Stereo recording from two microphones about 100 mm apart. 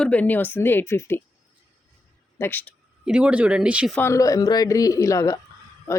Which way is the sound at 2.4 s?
20° left (ahead or behind).